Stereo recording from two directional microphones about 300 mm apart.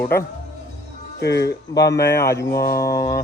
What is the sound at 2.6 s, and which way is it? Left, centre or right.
Speech, left.